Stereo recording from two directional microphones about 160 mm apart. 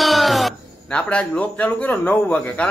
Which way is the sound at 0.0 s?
Centre (ahead or behind).